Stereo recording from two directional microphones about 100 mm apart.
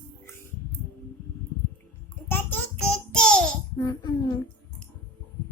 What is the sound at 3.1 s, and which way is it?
Babbling, 10° left (ahead or behind).